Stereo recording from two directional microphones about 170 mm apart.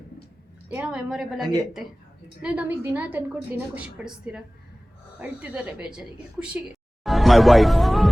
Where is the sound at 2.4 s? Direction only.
5° right (ahead or behind).